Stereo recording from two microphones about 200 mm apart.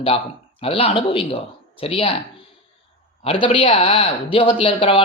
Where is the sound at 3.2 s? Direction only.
25° left (ahead or behind).